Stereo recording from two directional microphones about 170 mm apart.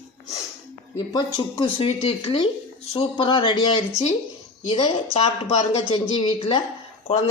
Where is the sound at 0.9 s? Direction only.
25° left (ahead or behind).